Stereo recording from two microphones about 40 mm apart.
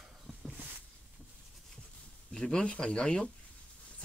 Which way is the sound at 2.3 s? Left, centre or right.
Left.